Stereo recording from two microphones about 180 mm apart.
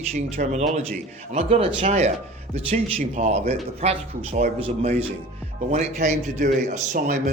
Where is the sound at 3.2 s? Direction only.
40° right (ahead or behind).